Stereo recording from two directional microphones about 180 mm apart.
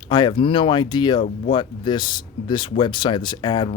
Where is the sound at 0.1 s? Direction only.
25° left (ahead or behind).